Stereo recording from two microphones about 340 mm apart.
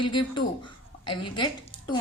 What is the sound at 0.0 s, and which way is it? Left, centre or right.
Speech, centre.